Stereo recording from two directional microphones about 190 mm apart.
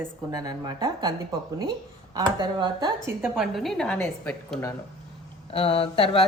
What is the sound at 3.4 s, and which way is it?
Speech, centre (ahead or behind).